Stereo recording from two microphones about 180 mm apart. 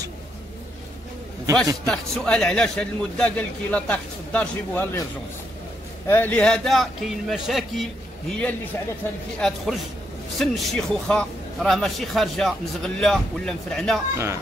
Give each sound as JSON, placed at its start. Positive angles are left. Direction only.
{"t": 1.9, "sound": "a man's voice", "side_deg": 5}
{"t": 6.0, "sound": "a man's voice", "side_deg": 10}
{"t": 14.1, "sound": "speech", "side_deg": -15}